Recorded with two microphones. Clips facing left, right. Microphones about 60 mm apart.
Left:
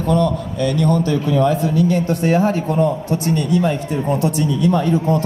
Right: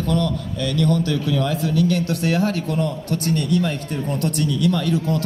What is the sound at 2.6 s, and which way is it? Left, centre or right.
Speech, left.